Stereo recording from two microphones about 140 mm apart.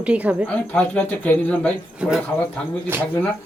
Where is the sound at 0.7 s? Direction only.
10° left (ahead or behind).